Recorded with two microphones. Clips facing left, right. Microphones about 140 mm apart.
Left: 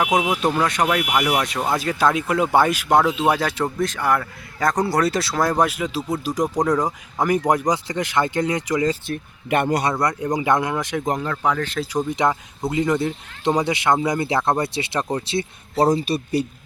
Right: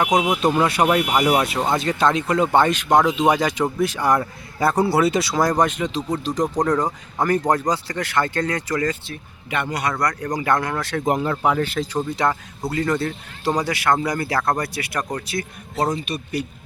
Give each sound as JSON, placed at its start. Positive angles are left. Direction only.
{"t": 0.0, "sound": "speech", "side_deg": 5}
{"t": 0.5, "sound": "speech", "side_deg": -10}
{"t": 0.9, "sound": "speech", "side_deg": -25}
{"t": 1.1, "sound": "speech", "side_deg": -15}
{"t": 1.5, "sound": "speech", "side_deg": 0}
{"t": 3.1, "sound": "speech", "side_deg": -15}
{"t": 3.3, "sound": "speech", "side_deg": 0}
{"t": 4.7, "sound": "speech", "side_deg": -5}
{"t": 9.0, "sound": "speech", "side_deg": 50}
{"t": 9.9, "sound": "speech", "side_deg": 20}
{"t": 11.0, "sound": "speech", "side_deg": -5}
{"t": 11.8, "sound": "speech", "side_deg": 15}